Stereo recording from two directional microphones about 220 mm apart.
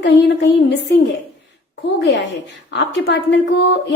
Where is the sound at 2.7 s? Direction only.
50° left (ahead or behind).